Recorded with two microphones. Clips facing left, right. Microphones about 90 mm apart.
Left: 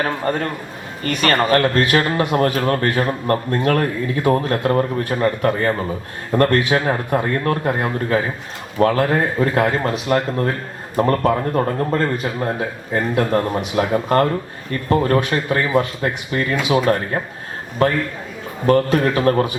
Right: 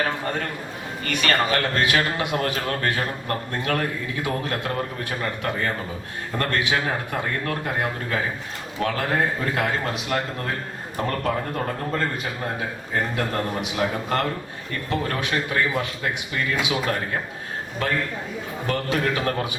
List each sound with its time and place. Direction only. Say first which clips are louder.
0.0 s speech: left 5 dB; 40° left (ahead or behind)